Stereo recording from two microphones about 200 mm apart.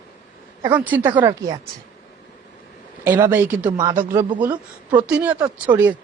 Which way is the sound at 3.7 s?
20° right (ahead or behind).